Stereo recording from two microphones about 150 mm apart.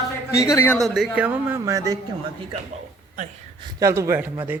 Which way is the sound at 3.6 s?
20° right (ahead or behind).